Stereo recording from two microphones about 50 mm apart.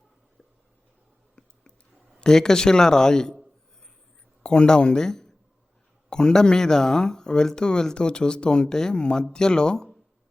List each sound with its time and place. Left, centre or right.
2.1 s speech: centre
4.4 s speech: centre